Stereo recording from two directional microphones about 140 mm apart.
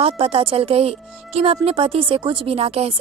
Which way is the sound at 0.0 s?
40° right (ahead or behind).